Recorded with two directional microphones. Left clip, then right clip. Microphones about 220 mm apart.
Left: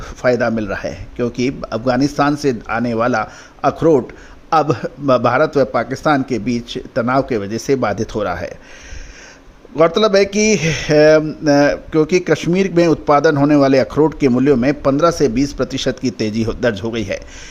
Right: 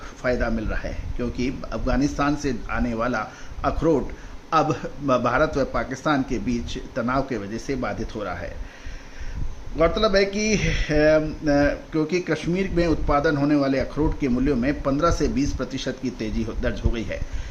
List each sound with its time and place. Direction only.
0.0 s a man's voice: 40° left (ahead or behind)
9.7 s speech: 45° left (ahead or behind)